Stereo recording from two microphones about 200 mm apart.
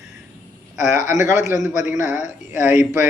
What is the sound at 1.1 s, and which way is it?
A man's voice, 15° right (ahead or behind).